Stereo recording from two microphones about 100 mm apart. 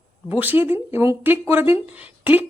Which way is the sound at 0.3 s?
15° right (ahead or behind).